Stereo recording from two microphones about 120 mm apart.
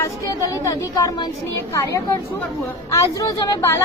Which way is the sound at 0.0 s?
25° left (ahead or behind).